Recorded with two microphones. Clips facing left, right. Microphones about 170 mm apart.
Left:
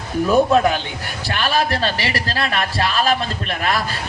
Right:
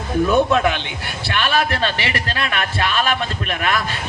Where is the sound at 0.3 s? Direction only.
35° left (ahead or behind).